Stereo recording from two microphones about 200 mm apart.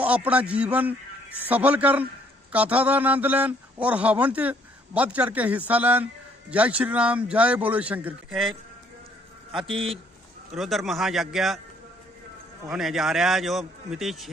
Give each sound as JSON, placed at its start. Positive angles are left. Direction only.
{"t": 0.0, "sound": "a man's voice", "side_deg": -5}
{"t": 9.7, "sound": "a man's voice", "side_deg": -25}
{"t": 10.5, "sound": "a man's voice", "side_deg": 0}
{"t": 12.6, "sound": "a man's voice", "side_deg": 0}